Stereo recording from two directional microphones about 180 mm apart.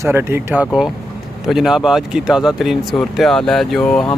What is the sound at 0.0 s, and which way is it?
Speech, 15° right (ahead or behind).